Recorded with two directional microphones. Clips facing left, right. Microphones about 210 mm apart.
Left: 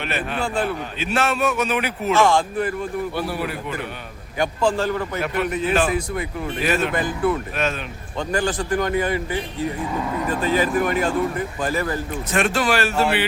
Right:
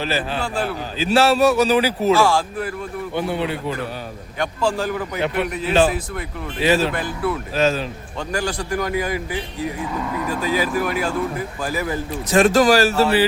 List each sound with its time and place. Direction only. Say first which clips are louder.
0.0 s speech: right 2 dB; 30° right (ahead or behind)
2.1 s speech: even; 5° right (ahead or behind)
3.2 s a man's voice: right 3 dB; 25° right (ahead or behind)
4.8 s speech: even; 5° right (ahead or behind)
6.6 s speech: right 4 dB; 30° right (ahead or behind)
6.9 s speech: left 2 dB; centre (ahead or behind)
7.5 s speech: right 6 dB; 30° right (ahead or behind)
8.3 s speech: left 2 dB; 10° right (ahead or behind)
12.1 s speech: right 8 dB; 35° right (ahead or behind)